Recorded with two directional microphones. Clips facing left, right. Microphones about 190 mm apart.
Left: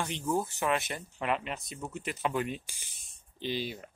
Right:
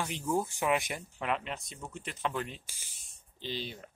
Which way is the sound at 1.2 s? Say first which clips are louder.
Left 2 dB; centre (ahead or behind).